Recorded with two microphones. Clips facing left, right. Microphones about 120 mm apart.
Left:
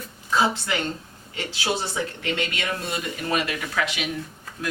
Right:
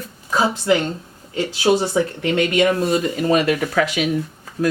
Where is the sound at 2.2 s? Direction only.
20° right (ahead or behind).